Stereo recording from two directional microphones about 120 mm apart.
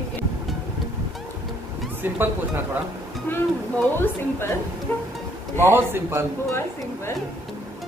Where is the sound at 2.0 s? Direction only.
15° right (ahead or behind).